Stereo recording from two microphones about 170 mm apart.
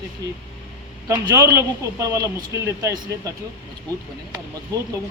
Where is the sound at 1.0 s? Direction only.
20° right (ahead or behind).